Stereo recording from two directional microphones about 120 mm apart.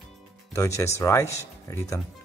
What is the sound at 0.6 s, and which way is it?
Speech, 25° left (ahead or behind).